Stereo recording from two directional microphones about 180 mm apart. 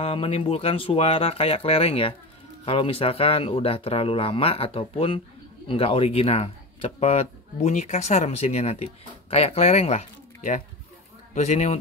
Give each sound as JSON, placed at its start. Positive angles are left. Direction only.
{"t": 0.0, "sound": "speech", "side_deg": 35}